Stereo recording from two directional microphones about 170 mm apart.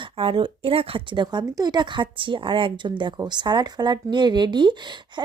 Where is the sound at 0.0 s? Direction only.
30° right (ahead or behind).